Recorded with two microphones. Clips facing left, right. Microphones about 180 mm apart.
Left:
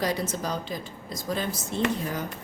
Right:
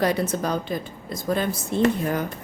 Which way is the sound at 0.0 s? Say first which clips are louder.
Right 5 dB; 60° right (ahead or behind).